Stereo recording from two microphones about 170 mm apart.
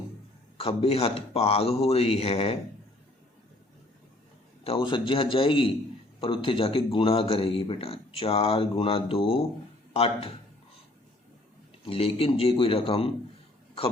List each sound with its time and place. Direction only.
0.5 s speech: 35° left (ahead or behind)
4.6 s speech: 30° left (ahead or behind)
11.9 s speech: 35° left (ahead or behind)